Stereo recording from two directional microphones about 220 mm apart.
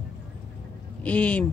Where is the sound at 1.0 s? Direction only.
5° left (ahead or behind).